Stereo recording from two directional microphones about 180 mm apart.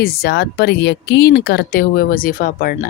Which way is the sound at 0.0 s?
60° left (ahead or behind).